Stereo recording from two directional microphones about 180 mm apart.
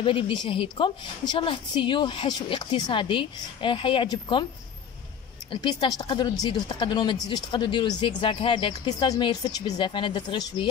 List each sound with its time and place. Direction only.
0.0 s speech: 30° left (ahead or behind)
5.5 s speech: 25° left (ahead or behind)